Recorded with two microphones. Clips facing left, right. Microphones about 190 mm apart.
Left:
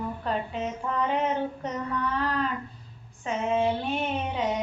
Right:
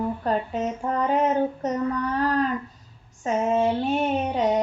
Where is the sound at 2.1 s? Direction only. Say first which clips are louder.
Right 5 dB; 45° right (ahead or behind).